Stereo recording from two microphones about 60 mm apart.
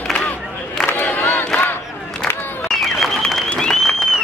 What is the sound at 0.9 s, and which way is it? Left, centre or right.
Crowd, left.